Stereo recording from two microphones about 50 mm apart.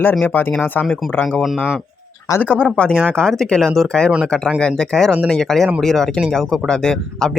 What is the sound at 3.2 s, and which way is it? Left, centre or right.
Speech, centre.